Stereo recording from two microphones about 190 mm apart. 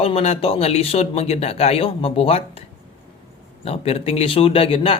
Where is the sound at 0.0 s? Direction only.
30° left (ahead or behind).